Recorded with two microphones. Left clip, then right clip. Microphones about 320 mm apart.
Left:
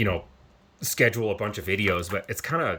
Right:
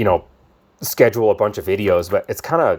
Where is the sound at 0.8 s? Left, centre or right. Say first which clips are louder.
Right 9 dB; centre.